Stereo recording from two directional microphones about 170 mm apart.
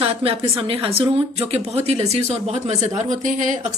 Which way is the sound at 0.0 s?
35° right (ahead or behind).